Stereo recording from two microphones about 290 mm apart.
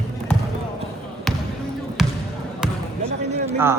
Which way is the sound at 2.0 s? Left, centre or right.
Centre.